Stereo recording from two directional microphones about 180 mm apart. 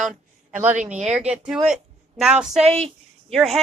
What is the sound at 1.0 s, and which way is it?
Speech, 5° right (ahead or behind).